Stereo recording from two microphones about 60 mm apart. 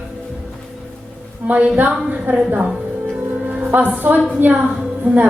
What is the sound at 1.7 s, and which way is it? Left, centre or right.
A woman's voice, right.